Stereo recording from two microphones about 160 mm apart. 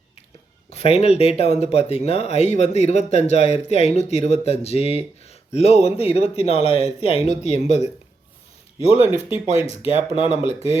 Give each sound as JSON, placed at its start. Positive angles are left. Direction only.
{"t": 0.7, "sound": "speech", "side_deg": 40}